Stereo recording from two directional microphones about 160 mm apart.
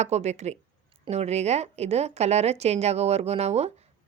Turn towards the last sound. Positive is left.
turn(degrees=-40)  # may be behind; listen again after turning